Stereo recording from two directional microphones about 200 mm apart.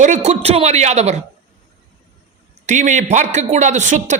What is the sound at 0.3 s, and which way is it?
Speech, 30° right (ahead or behind).